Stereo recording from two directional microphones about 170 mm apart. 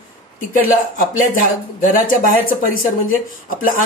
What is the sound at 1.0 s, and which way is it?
Speech, 50° left (ahead or behind).